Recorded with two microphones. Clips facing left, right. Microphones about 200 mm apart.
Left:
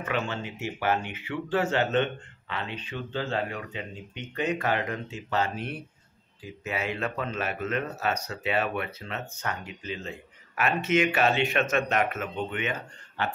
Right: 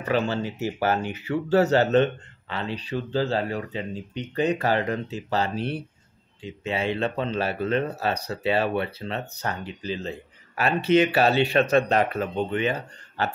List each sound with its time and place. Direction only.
0.0 s speech: 35° right (ahead or behind)